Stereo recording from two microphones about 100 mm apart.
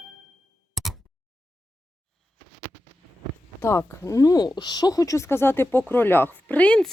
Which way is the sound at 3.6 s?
25° left (ahead or behind).